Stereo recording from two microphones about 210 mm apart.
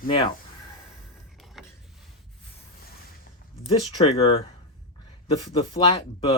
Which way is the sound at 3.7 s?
25° left (ahead or behind).